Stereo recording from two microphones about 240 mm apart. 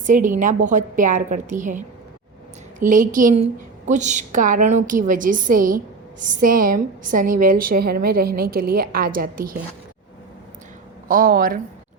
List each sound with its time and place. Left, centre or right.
0.0 s a woman's voice: right
11.1 s a woman's voice: right